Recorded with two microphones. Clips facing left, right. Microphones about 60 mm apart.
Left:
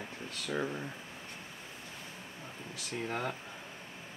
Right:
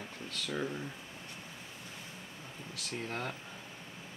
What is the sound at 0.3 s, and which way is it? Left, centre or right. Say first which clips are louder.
Speech: left 1 dB; centre.